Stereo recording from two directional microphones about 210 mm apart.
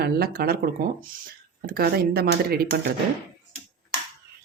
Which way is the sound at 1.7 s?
45° right (ahead or behind).